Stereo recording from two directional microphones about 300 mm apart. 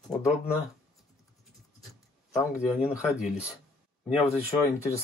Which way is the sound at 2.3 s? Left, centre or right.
Centre.